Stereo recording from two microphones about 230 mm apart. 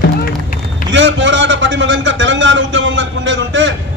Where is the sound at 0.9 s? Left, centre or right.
Right.